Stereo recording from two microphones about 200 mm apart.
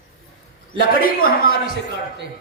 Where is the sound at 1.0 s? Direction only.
45° left (ahead or behind).